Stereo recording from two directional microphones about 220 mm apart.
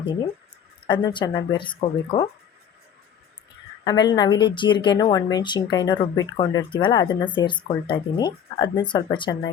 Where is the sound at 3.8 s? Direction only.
20° left (ahead or behind).